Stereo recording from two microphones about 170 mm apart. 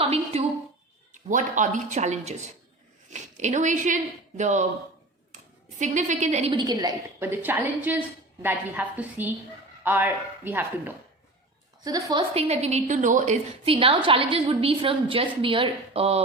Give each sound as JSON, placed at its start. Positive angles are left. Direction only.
{"t": 0.0, "sound": "a woman's voice", "side_deg": -35}
{"t": 1.3, "sound": "a woman's voice", "side_deg": -45}
{"t": 6.5, "sound": "a woman's voice", "side_deg": -25}
{"t": 12.3, "sound": "a woman's voice", "side_deg": -35}
{"t": 13.7, "sound": "a woman's voice", "side_deg": -30}